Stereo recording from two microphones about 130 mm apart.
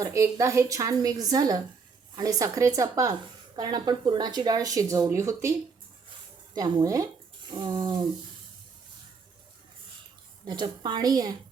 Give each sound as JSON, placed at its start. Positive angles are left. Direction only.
{"t": 0.0, "sound": "a woman's voice", "side_deg": -25}
{"t": 10.4, "sound": "a woman's voice", "side_deg": -35}